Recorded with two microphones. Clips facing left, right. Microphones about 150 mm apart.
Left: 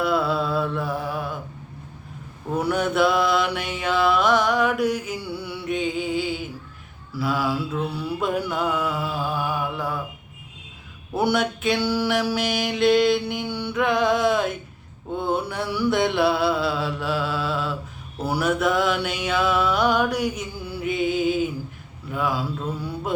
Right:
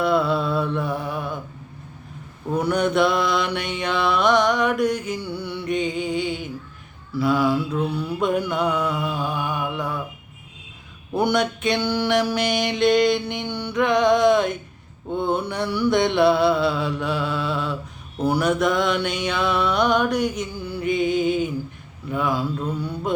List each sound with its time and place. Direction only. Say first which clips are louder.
0.0 s mantra: right 2 dB; 5° left (ahead or behind)
2.6 s mantra: right 2 dB; 5° left (ahead or behind)
11.1 s mantra: right 1 dB; 5° left (ahead or behind)